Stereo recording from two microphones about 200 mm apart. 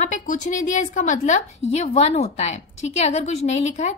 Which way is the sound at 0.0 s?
40° left (ahead or behind).